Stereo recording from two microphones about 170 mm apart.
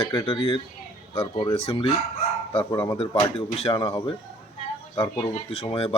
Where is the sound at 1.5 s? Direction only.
35° left (ahead or behind).